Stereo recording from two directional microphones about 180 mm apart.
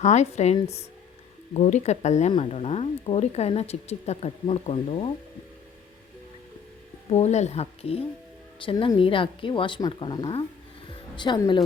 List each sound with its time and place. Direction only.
0.0 s speech: 40° left (ahead or behind)
7.1 s a woman's voice: 40° left (ahead or behind); by 10.2 s 25° left (ahead or behind)
10.8 s music: 25° left (ahead or behind)